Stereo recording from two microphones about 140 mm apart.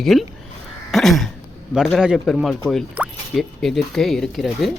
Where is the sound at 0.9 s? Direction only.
Centre (ahead or behind).